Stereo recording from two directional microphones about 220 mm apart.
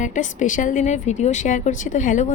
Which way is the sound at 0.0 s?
35° left (ahead or behind).